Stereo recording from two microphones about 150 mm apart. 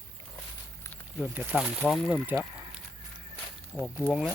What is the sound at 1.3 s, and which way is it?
Speech, 10° right (ahead or behind).